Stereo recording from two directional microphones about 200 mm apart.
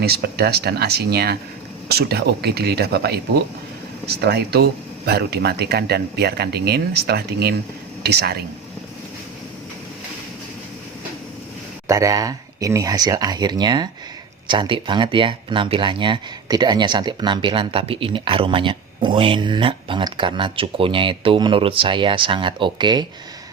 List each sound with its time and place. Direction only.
0.0 s speech: 50° right (ahead or behind)
11.9 s speech: 15° right (ahead or behind)